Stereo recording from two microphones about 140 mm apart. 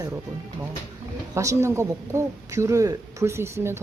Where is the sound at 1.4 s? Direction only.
20° right (ahead or behind).